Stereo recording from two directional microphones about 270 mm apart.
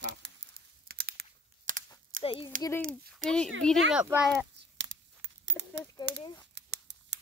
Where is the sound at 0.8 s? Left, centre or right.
Right.